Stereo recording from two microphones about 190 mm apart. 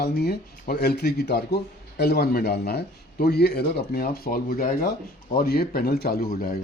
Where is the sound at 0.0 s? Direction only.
55° left (ahead or behind).